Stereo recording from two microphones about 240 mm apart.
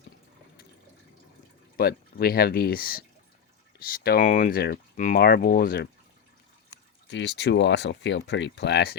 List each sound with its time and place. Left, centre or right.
1.7 s speech: left
7.1 s speech: left